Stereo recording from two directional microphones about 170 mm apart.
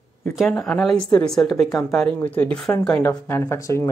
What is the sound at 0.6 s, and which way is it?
Speech, centre (ahead or behind).